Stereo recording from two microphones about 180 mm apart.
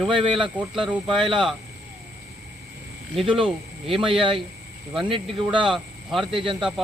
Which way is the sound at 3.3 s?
30° right (ahead or behind).